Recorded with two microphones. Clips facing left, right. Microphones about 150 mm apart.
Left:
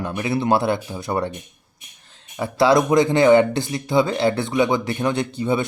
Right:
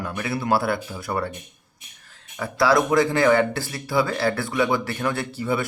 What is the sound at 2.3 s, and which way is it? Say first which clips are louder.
A man's voice: left 3 dB; 25° left (ahead or behind).